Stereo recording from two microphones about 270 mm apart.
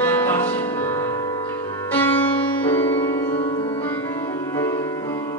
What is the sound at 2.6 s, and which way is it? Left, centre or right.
Music, centre.